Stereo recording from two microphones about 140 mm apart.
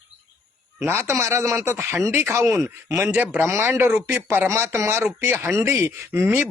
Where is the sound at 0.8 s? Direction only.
20° right (ahead or behind).